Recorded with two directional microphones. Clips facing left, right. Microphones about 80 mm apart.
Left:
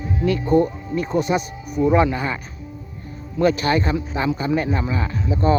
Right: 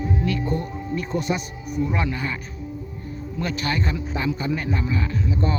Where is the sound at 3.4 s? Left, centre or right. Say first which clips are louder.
Left 8 dB; left.